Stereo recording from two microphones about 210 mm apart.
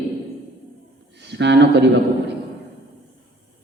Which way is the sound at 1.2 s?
55° right (ahead or behind).